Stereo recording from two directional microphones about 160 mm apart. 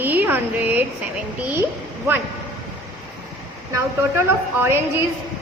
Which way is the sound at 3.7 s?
15° right (ahead or behind).